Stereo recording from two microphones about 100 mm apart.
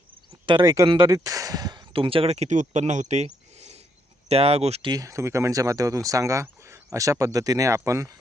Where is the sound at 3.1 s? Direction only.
90° right.